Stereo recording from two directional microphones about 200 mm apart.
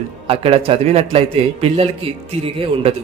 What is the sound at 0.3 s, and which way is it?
Speech, 30° right (ahead or behind).